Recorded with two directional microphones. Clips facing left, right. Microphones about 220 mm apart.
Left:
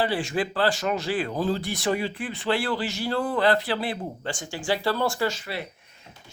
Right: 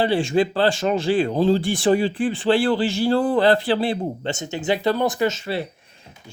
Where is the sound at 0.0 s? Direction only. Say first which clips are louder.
Right 7 dB; 25° right (ahead or behind).